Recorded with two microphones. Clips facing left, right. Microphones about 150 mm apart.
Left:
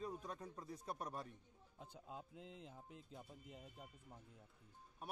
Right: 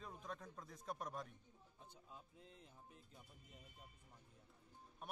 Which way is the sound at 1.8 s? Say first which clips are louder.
Left 8 dB; 90° left.